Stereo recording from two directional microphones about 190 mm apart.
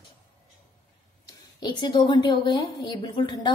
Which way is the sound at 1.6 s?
25° left (ahead or behind).